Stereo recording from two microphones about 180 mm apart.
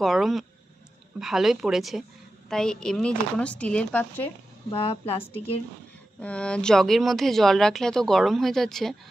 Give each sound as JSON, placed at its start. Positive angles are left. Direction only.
{"t": 0.0, "sound": "speech", "side_deg": 0}
{"t": 4.6, "sound": "a woman's voice", "side_deg": 30}
{"t": 6.1, "sound": "speech", "side_deg": 5}